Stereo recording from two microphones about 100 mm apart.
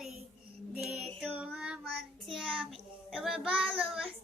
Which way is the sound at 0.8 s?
5° right (ahead or behind).